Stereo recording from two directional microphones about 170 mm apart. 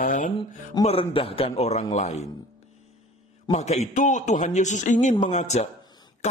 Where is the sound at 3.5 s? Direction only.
40° left (ahead or behind).